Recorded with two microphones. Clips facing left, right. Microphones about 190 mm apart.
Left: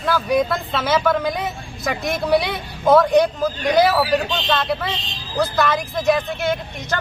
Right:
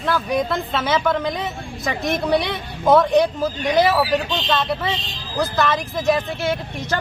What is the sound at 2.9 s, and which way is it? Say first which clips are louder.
Speech: left 1 dB; centre (ahead or behind).